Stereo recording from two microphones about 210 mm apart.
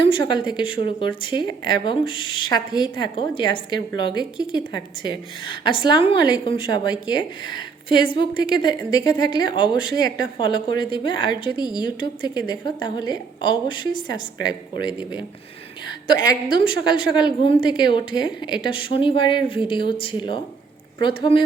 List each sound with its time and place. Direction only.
0.0 s a woman's voice: 20° left (ahead or behind)
8.2 s a woman's voice: 50° right (ahead or behind)
9.0 s a woman's voice: 20° left (ahead or behind)
9.9 s a woman's voice: 50° right (ahead or behind)
10.3 s a woman's voice: 20° left (ahead or behind)
16.5 s a woman's voice: 20° left (ahead or behind)